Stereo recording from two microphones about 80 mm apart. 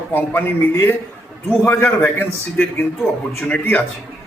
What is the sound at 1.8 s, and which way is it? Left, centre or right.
A man's voice, left.